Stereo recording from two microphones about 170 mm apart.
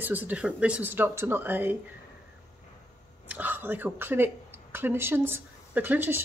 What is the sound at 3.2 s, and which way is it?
Speech, 10° right (ahead or behind).